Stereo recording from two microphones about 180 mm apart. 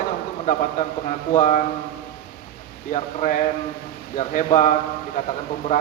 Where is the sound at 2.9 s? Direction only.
45° left (ahead or behind).